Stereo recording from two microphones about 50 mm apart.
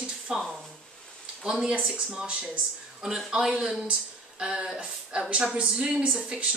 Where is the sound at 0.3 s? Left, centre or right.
Centre.